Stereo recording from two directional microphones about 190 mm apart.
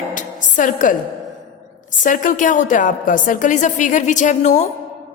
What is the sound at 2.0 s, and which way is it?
A woman's voice, 45° left (ahead or behind).